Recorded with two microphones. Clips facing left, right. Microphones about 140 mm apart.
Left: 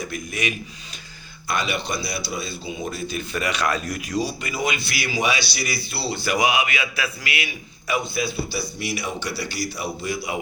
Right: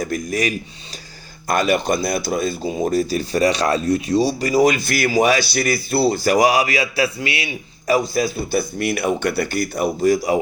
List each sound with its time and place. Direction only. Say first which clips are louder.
0.0 s speech: right 7 dB; 45° right (ahead or behind)